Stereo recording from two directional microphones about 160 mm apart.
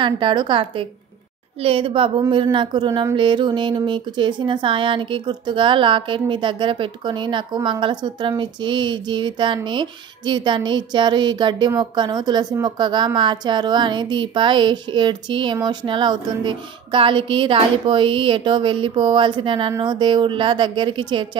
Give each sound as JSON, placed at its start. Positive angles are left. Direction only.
{"t": 0.0, "sound": "a woman's voice", "side_deg": -30}